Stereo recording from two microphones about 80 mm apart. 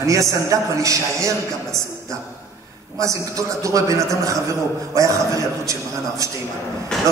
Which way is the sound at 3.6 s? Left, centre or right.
Right.